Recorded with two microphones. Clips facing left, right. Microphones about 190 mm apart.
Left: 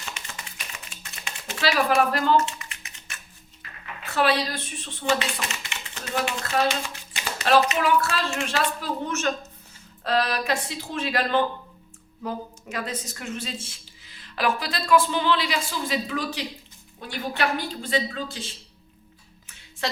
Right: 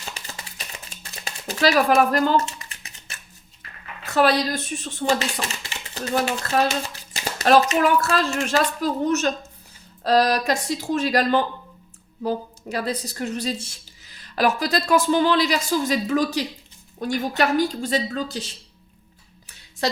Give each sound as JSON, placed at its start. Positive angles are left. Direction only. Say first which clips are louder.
{"t": 0.0, "sound": "a sound", "louder": "right 2 dB", "side_deg": -35}
{"t": 4.0, "sound": "a woman's voice", "louder": "right 4 dB", "side_deg": -40}
{"t": 19.8, "sound": "speech", "louder": "right 5 dB", "side_deg": -40}